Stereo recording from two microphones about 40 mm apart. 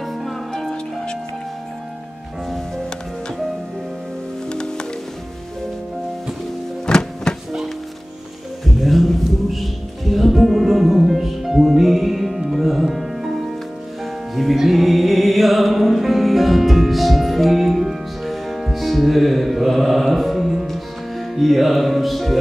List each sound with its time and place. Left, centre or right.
0.0 s music: centre
0.5 s music: centre
4.5 s music: left
6.9 s music: centre
8.8 s music: centre